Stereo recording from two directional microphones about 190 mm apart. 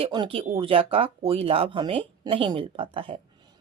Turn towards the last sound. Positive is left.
turn(degrees=-30)  # may be behind; listen again after turning